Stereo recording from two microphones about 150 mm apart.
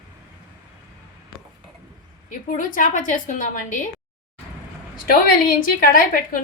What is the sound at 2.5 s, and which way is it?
A woman's voice, 60° left (ahead or behind).